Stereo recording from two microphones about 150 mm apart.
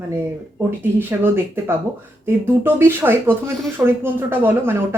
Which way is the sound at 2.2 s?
15° right (ahead or behind).